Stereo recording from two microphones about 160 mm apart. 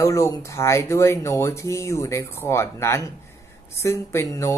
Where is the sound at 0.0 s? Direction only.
20° left (ahead or behind).